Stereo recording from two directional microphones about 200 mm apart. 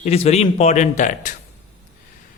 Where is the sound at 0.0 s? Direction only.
30° left (ahead or behind).